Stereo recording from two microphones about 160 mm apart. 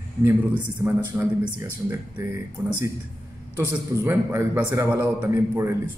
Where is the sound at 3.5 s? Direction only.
15° right (ahead or behind).